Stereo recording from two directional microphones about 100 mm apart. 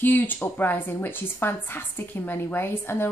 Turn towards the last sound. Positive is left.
turn(degrees=25)  # may be behind; listen again after turning